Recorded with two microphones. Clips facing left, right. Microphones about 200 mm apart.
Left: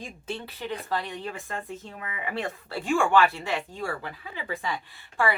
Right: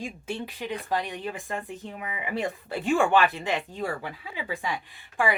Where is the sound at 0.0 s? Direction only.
15° right (ahead or behind).